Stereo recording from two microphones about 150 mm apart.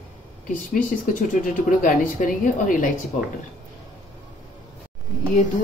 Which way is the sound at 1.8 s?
60° left (ahead or behind).